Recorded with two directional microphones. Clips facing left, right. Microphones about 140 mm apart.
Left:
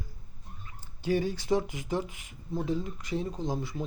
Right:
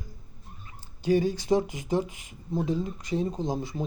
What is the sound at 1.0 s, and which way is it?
Speech, 15° right (ahead or behind).